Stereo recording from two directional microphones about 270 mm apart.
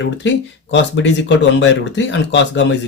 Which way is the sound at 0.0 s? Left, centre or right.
Left.